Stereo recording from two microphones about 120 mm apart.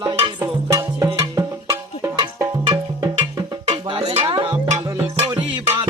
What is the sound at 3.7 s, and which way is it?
Music, 60° right (ahead or behind).